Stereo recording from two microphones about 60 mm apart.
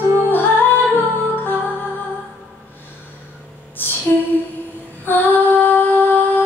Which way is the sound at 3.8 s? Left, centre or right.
Left.